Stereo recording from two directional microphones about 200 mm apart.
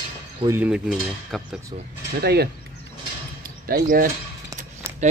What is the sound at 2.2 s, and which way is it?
Speech, 55° right (ahead or behind).